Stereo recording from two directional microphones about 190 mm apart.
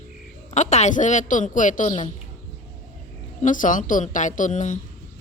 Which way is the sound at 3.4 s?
45° left (ahead or behind).